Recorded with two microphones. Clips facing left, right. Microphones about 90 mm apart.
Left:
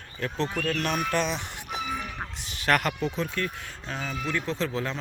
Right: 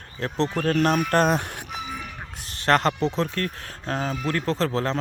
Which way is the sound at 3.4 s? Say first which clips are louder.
Right 2 dB; 45° right (ahead or behind).